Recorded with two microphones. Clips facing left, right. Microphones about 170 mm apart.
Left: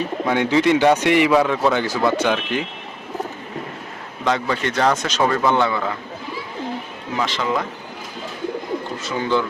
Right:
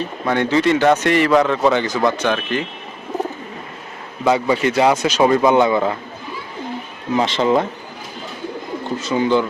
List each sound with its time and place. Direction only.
0.0 s a man's voice: 10° left (ahead or behind)
4.2 s speech: 10° right (ahead or behind)
7.2 s speech: 25° right (ahead or behind)
9.0 s speech: 15° right (ahead or behind)